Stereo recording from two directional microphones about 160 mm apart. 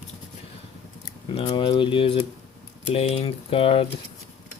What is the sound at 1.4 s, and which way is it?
Speech, 30° left (ahead or behind).